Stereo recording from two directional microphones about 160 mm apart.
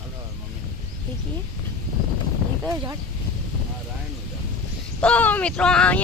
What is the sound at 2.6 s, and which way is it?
Speech, 15° right (ahead or behind).